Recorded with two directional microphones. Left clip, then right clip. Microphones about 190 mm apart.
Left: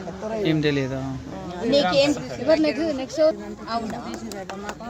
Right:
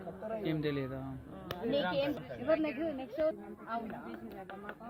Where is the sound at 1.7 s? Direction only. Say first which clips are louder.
Left 15 dB; 45° left (ahead or behind).